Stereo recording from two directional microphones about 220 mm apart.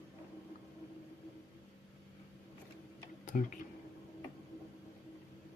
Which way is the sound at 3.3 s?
35° left (ahead or behind).